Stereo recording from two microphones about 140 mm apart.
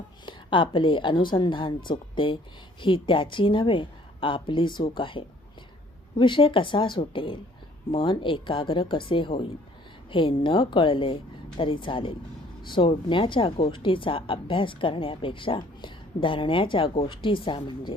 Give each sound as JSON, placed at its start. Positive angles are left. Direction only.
{"t": 0.3, "sound": "a woman's voice", "side_deg": 35}